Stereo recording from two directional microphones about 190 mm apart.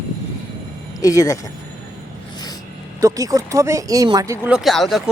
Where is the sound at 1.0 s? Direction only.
15° left (ahead or behind).